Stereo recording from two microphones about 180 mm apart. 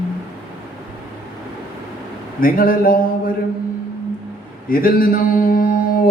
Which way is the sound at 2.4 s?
50° left (ahead or behind).